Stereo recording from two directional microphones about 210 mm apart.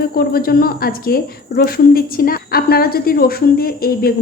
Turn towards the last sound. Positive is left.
turn(degrees=45)  # may be behind; listen again after turning